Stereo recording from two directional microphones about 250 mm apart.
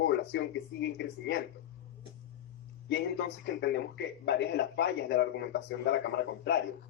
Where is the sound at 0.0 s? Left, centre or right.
Left.